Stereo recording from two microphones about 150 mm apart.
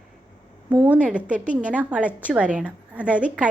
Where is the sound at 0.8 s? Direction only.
10° right (ahead or behind).